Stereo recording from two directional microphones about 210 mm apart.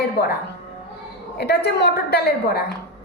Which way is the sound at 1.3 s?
50° left (ahead or behind).